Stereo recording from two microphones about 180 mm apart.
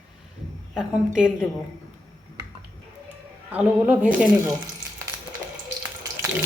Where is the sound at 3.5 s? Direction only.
10° right (ahead or behind).